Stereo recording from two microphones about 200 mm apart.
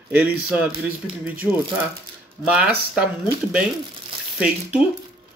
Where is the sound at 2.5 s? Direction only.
5° right (ahead or behind).